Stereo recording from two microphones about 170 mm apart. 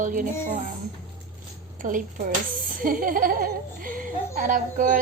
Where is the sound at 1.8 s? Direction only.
50° right (ahead or behind).